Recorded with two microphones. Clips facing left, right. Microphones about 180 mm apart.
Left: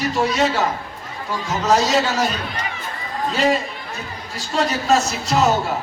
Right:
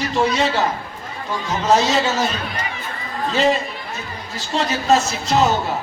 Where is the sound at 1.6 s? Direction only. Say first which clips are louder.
Right 1 dB; centre (ahead or behind).